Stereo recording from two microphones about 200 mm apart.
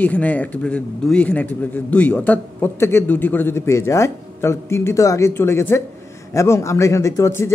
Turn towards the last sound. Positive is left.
turn(degrees=15)  # may be behind; listen again after turning